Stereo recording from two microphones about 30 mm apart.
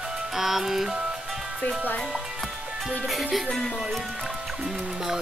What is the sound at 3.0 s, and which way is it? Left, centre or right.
Speech, centre.